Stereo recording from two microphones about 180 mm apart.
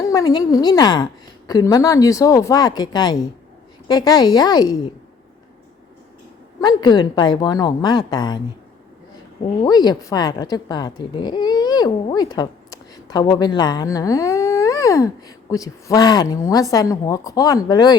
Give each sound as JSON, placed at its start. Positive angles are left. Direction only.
{"t": 0.0, "sound": "a woman's voice", "side_deg": 20}
{"t": 6.6, "sound": "a woman's voice", "side_deg": 25}
{"t": 9.6, "sound": "a woman's voice", "side_deg": 20}